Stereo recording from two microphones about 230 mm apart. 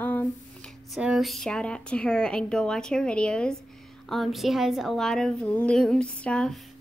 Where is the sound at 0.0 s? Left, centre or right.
Centre.